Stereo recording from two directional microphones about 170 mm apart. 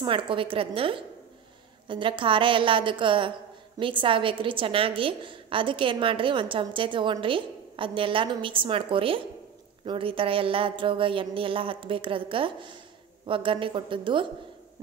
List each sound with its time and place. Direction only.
0.0 s a woman's voice: 30° right (ahead or behind)